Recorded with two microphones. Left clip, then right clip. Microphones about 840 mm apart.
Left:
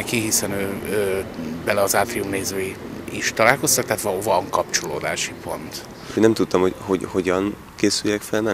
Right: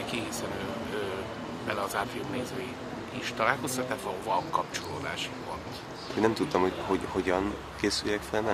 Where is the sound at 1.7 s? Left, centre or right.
Left.